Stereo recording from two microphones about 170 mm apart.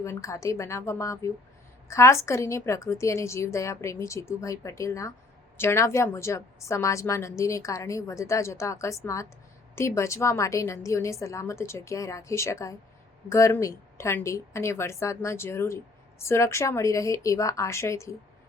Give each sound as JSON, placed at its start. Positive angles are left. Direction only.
{"t": 0.0, "sound": "a woman's voice", "side_deg": 15}